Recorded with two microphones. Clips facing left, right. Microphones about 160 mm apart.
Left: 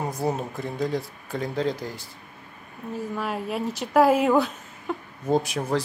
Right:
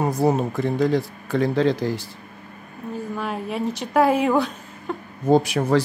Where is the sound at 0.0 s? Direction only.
80° right.